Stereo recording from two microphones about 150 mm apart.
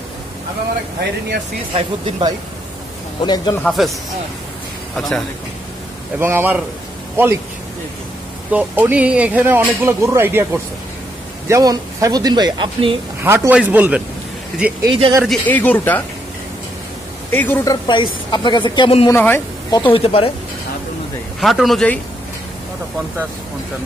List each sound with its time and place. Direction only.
1.7 s speech: 35° right (ahead or behind)
3.2 s speech: 30° left (ahead or behind)
3.6 s speech: centre (ahead or behind)
4.9 s a man's voice: centre (ahead or behind)
6.1 s speech: 15° right (ahead or behind)
8.5 s speech: 10° right (ahead or behind); by 12.9 s 30° right (ahead or behind)
13.2 s speech: 15° right (ahead or behind)
14.8 s speech: 30° right (ahead or behind)
15.2 s speech: 10° left (ahead or behind)
17.3 s a woman's voice: 15° left (ahead or behind)
17.6 s speech: 30° left (ahead or behind)
19.0 s speech: 15° left (ahead or behind)
19.9 s speech: 40° left (ahead or behind)
21.4 s speech: centre (ahead or behind)